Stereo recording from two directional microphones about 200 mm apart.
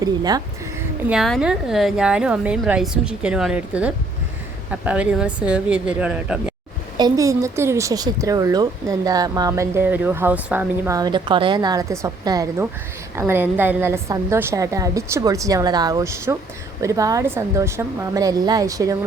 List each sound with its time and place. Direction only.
0.0 s speech: 20° right (ahead or behind)
1.0 s a woman's voice: centre (ahead or behind)
6.9 s a woman's voice: 20° right (ahead or behind)